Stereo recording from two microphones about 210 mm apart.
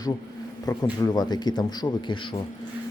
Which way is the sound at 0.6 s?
20° left (ahead or behind).